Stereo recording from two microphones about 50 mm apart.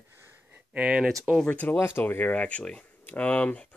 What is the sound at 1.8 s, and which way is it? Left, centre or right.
Speech, left.